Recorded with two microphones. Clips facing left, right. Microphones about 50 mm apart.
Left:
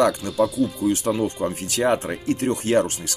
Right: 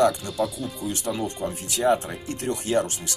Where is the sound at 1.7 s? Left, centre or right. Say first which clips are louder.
Even; left.